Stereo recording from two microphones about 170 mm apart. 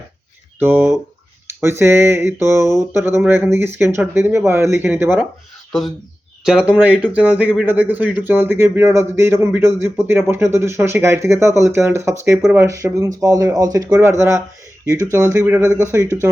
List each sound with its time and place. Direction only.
0.6 s speech: 10° right (ahead or behind)
6.4 s speech: 5° right (ahead or behind)